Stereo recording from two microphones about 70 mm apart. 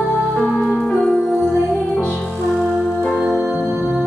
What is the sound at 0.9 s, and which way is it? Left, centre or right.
Music, centre.